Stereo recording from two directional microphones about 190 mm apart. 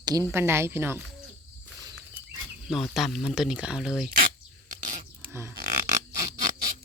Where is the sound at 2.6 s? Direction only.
Centre (ahead or behind).